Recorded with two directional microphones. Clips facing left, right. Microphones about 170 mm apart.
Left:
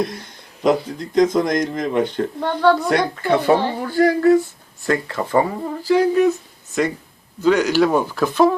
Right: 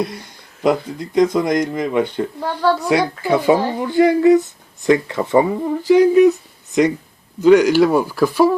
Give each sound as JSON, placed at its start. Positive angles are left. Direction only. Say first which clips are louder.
{"t": 0.9, "sound": "speech", "louder": "right 1 dB", "side_deg": -10}
{"t": 7.4, "sound": "speech", "louder": "right 5 dB", "side_deg": -15}